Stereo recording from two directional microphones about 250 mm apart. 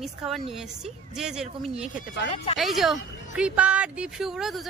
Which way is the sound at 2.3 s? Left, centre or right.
Left.